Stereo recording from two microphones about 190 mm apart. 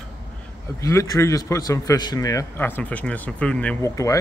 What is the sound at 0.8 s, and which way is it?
A man's voice, 15° left (ahead or behind).